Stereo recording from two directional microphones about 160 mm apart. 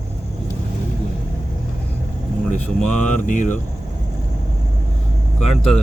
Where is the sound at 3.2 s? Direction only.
50° left (ahead or behind).